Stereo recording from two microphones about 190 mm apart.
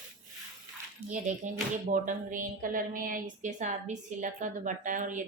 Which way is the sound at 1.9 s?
45° right (ahead or behind).